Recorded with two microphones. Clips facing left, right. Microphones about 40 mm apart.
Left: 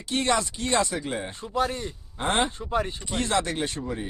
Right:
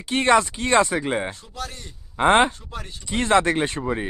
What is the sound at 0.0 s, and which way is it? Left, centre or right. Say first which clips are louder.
Speech: right 7 dB; right.